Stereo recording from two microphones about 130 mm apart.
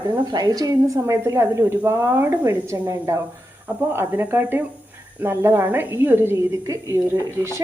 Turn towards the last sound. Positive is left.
turn(degrees=-20)  # may be behind; listen again after turning